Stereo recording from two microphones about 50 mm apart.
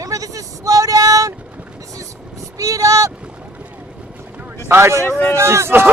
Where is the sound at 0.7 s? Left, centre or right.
Right.